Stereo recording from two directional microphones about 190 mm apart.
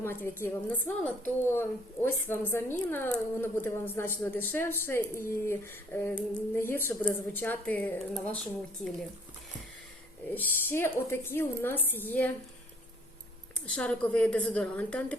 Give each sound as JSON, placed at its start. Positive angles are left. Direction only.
{"t": 0.0, "sound": "a woman's voice", "side_deg": 10}
{"t": 10.3, "sound": "a woman's voice", "side_deg": 10}
{"t": 13.7, "sound": "a woman's voice", "side_deg": 5}